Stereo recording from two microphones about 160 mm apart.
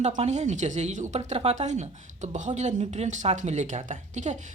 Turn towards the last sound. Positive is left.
turn(degrees=-50)  # may be behind; listen again after turning